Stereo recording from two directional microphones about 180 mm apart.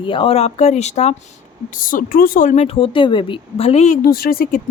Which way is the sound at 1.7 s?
50° left (ahead or behind).